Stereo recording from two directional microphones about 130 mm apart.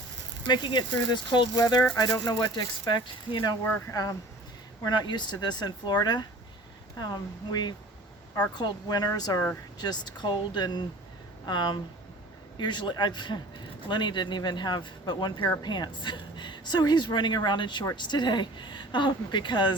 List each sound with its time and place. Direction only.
0.4 s speech: 35° left (ahead or behind)
4.8 s speech: 35° left (ahead or behind)